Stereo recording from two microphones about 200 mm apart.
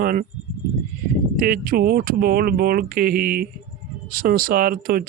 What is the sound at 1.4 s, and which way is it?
Speech, 50° right (ahead or behind).